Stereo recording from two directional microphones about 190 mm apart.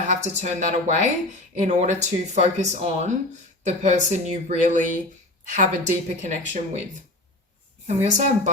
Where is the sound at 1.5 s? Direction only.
40° right (ahead or behind).